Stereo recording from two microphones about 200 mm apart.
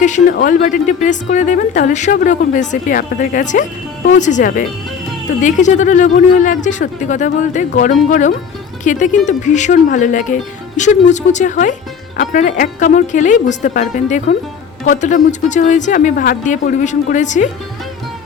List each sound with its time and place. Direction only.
0.0 s a woman's voice: 40° left (ahead or behind)